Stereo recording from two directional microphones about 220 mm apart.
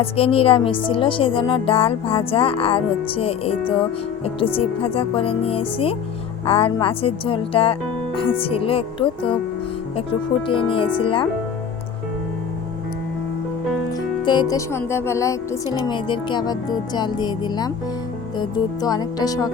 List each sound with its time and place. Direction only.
0.0 s a woman's voice: 25° left (ahead or behind)
14.3 s a woman's voice: 15° left (ahead or behind)